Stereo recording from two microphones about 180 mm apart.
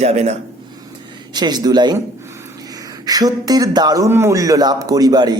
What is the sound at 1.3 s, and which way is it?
Speech, 25° right (ahead or behind).